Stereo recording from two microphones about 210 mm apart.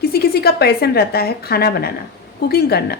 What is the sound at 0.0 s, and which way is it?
A woman's voice, 45° left (ahead or behind).